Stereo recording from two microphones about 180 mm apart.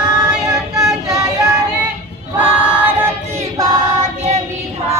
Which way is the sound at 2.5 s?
5° right (ahead or behind).